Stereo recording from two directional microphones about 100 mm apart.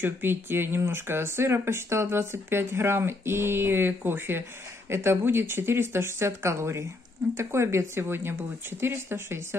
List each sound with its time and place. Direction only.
0.0 s speech: 20° right (ahead or behind)